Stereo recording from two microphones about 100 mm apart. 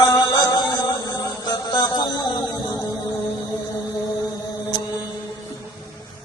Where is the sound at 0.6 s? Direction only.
40° left (ahead or behind).